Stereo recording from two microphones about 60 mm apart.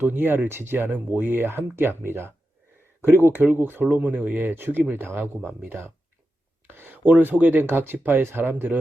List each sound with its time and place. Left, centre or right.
0.0 s speech: right